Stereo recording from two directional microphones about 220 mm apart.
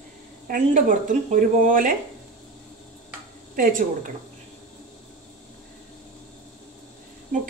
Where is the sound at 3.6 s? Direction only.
40° right (ahead or behind).